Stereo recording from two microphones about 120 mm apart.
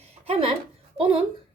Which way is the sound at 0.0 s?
55° right (ahead or behind).